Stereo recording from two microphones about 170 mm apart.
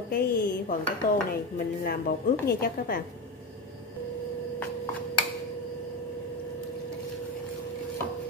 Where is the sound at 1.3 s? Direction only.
65° left (ahead or behind).